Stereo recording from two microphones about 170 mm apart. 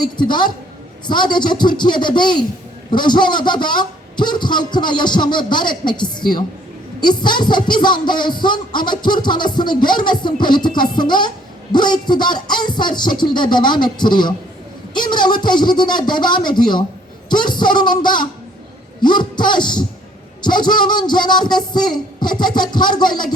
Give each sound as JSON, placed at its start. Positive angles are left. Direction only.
{"t": 0.0, "sound": "music", "side_deg": 25}